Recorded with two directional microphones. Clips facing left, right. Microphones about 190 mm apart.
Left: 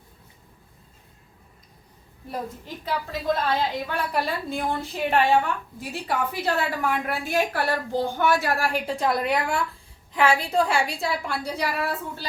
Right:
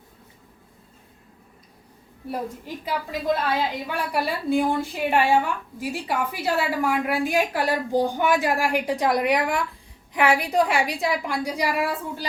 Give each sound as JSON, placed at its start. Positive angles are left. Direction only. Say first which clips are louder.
{"t": 2.3, "sound": "a woman's voice", "louder": "right 2 dB", "side_deg": -10}